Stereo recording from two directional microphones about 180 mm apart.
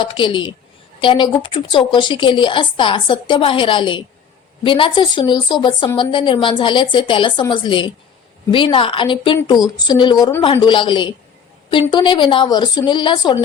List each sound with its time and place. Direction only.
0.0 s a woman's voice: 25° left (ahead or behind)